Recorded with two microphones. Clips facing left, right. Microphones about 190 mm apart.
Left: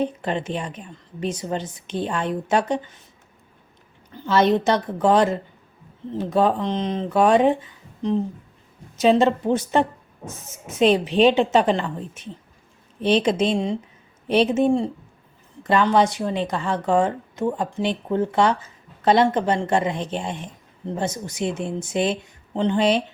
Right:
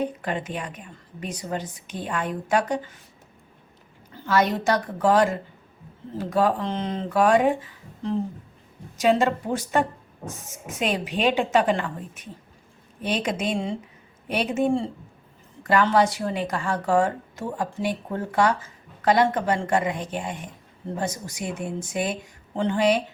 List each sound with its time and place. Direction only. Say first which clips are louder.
0.0 s speech: left 3 dB; 25° left (ahead or behind)
4.1 s speech: left 4 dB; 25° left (ahead or behind)